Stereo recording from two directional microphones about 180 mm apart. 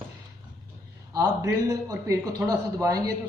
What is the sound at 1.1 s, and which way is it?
A man's voice, 20° right (ahead or behind).